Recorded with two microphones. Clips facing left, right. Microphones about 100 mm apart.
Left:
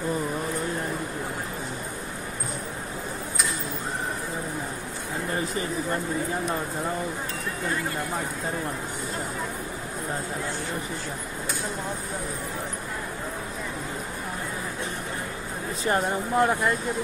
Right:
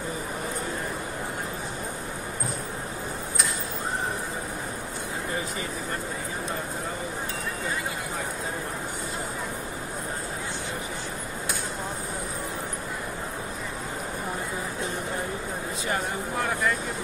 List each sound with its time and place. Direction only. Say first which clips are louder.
15.9 s speech: left 6 dB; 30° left (ahead or behind)